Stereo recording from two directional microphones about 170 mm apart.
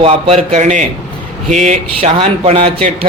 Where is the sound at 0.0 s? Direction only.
35° right (ahead or behind).